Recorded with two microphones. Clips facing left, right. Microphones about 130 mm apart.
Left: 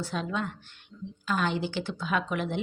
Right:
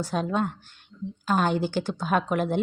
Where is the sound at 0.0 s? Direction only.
45° right (ahead or behind).